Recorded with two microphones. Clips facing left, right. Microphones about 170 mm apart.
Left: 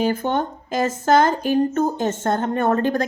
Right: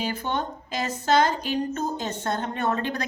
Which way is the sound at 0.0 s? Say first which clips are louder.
Left 7 dB; 50° left (ahead or behind).